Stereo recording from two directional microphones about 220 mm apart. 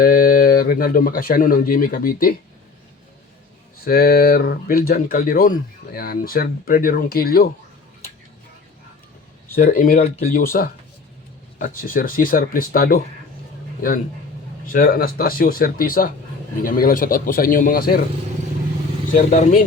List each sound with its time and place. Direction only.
0.0 s speech: 40° left (ahead or behind)
3.8 s speech: 45° left (ahead or behind)
9.6 s speech: 40° left (ahead or behind)
14.7 s speech: 40° left (ahead or behind)
19.1 s speech: 40° left (ahead or behind)